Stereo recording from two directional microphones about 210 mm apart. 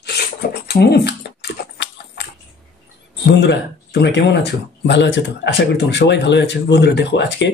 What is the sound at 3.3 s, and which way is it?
Speech, 55° left (ahead or behind).